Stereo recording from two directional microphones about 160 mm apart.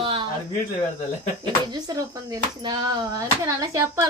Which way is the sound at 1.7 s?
25° right (ahead or behind).